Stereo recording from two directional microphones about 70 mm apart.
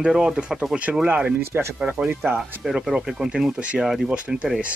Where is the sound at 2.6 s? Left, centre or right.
Centre.